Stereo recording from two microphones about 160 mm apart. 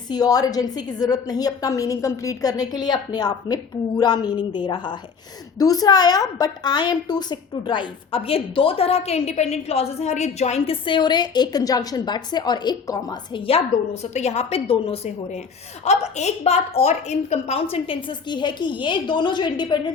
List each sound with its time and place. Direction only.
0.1 s a woman's voice: 25° left (ahead or behind); by 10.8 s 45° left (ahead or behind)
10.8 s a woman's voice: 30° left (ahead or behind)